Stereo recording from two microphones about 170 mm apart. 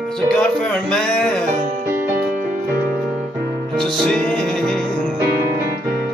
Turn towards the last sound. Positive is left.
turn(degrees=5)  # may be behind; listen again after turning